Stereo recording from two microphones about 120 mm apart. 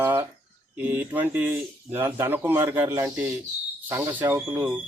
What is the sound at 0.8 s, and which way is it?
Speech, 15° right (ahead or behind).